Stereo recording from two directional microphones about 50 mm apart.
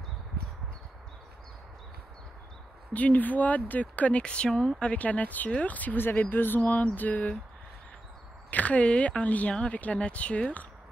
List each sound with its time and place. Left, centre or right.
2.9 s speech: left; by 4.9 s centre
4.9 s a sound: left
8.5 s speech: left